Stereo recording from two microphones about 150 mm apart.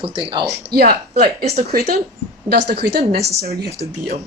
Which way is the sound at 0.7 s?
90° right.